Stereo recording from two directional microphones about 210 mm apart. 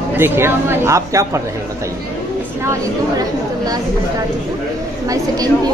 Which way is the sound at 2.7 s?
15° right (ahead or behind).